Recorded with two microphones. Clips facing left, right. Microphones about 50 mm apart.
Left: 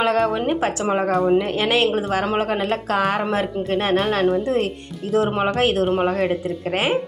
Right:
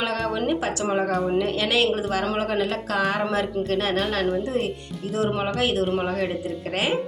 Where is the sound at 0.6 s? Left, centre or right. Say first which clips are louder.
Left 3 dB; left.